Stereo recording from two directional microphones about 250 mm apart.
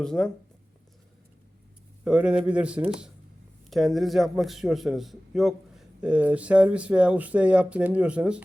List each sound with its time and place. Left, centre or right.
0.0 s a man's voice: centre
2.0 s a man's voice: centre